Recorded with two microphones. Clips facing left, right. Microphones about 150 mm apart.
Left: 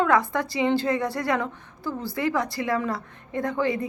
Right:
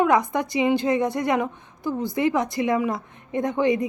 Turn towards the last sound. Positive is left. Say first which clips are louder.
# right 4 dB
turn(degrees=-20)  # may be behind; listen again after turning